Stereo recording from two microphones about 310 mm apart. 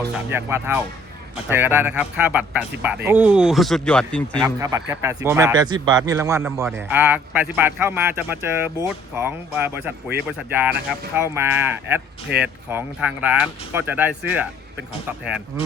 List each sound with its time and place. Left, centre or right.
0.3 s speech: centre
4.4 s speech: centre